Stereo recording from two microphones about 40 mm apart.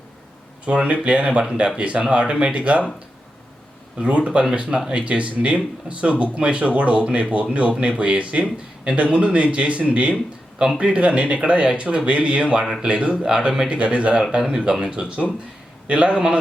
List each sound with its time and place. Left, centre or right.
0.6 s speech: right
3.9 s speech: right
8.4 s speech: centre
9.0 s speech: right
13.2 s speech: right
13.7 s speech: right
14.3 s speech: right